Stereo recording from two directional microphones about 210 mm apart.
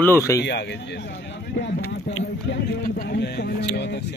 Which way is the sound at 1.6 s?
55° left (ahead or behind).